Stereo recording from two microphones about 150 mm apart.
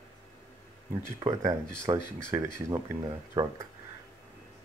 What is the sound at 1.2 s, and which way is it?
Speech, 25° right (ahead or behind).